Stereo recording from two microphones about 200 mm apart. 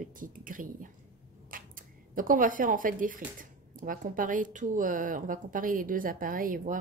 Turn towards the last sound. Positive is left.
turn(degrees=-40)  # may be behind; listen again after turning